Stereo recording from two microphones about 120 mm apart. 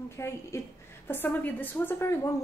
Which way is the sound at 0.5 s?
25° left (ahead or behind).